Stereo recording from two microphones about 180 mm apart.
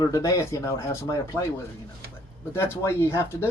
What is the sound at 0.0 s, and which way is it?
Speech, 20° left (ahead or behind).